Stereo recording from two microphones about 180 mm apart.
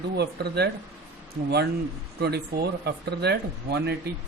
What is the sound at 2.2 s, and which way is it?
Speech, 65° right (ahead or behind).